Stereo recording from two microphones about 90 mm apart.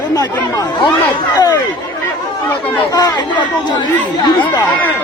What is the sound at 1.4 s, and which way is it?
Speech, 45° left (ahead or behind).